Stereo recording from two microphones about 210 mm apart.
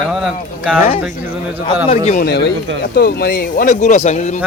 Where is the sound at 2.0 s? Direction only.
45° left (ahead or behind).